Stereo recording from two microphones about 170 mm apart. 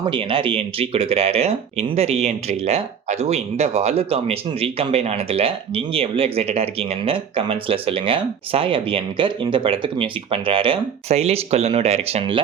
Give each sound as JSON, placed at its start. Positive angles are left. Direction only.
{"t": 0.0, "sound": "speech", "side_deg": -30}